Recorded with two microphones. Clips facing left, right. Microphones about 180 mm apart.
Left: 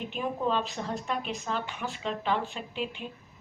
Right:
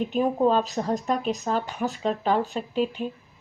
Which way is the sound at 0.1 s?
40° right (ahead or behind).